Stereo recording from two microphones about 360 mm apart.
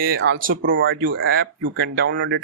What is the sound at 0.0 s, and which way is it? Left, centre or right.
Speech, right.